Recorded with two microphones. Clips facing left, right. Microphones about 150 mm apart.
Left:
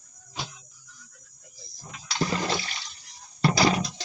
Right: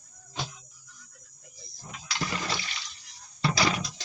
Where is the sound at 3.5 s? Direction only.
35° left (ahead or behind).